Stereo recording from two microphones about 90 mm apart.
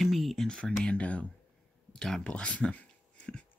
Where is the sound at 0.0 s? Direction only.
Centre (ahead or behind).